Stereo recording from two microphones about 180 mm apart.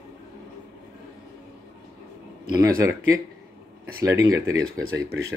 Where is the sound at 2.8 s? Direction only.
15° right (ahead or behind).